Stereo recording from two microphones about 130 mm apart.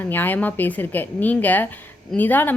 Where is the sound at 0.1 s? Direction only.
15° left (ahead or behind).